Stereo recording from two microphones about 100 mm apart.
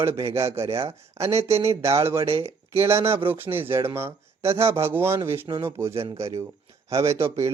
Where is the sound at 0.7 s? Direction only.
75° right (ahead or behind).